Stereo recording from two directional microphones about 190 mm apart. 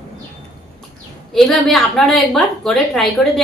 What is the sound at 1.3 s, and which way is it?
A woman's voice, centre (ahead or behind).